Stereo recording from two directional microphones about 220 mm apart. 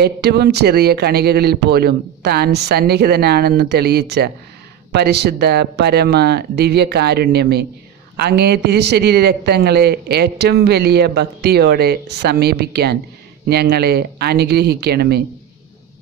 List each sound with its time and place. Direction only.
0.0 s a man's voice: 45° right (ahead or behind)